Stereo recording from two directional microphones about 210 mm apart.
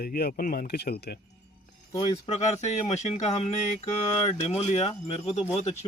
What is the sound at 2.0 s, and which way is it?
Speech, 25° left (ahead or behind).